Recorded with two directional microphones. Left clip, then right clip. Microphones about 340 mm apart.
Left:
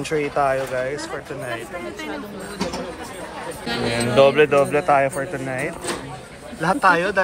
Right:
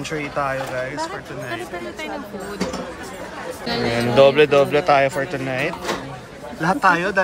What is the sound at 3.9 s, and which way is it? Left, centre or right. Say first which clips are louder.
Speech: right 1 dB; centre.